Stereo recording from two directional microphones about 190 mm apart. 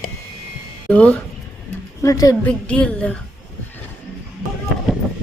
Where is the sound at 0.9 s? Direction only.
5° left (ahead or behind).